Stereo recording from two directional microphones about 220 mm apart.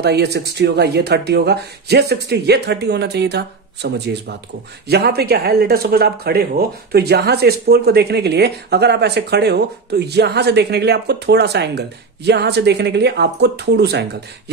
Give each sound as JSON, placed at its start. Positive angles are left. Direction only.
{"t": 0.0, "sound": "speech", "side_deg": -50}